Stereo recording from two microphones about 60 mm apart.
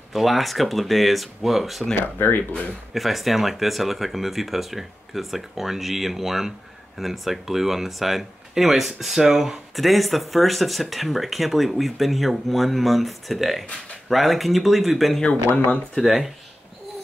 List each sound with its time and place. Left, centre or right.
0.1 s speech: centre
2.0 s speech: left
2.9 s speech: centre
15.2 s speech: left
16.0 s speech: centre